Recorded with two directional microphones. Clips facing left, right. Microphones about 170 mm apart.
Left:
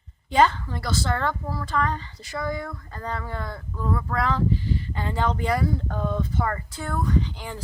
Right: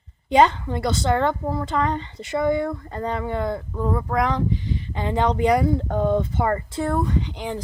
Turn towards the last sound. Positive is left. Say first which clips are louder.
# right 1 dB
turn(degrees=-20)  # may be behind; listen again after turning